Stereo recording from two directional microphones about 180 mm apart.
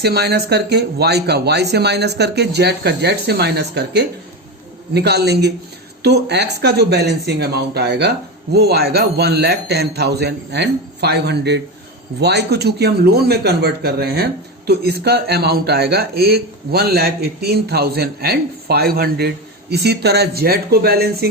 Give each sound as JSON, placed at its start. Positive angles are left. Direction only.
{"t": 0.0, "sound": "speech", "side_deg": -65}